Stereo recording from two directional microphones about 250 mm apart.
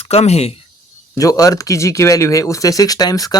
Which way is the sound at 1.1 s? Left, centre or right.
Centre.